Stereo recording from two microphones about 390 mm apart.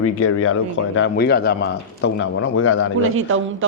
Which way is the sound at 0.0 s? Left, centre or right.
Left.